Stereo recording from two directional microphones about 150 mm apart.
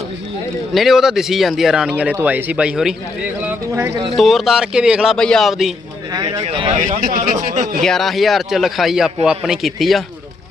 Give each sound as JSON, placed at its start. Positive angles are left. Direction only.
{"t": 0.7, "sound": "speech", "side_deg": 0}
{"t": 3.4, "sound": "speech", "side_deg": -15}
{"t": 4.2, "sound": "speech", "side_deg": 0}
{"t": 6.4, "sound": "speech", "side_deg": -40}
{"t": 7.0, "sound": "speech", "side_deg": -70}
{"t": 7.8, "sound": "speech", "side_deg": 0}